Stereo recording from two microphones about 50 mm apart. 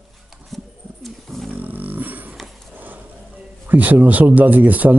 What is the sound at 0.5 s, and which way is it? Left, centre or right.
Bird, centre.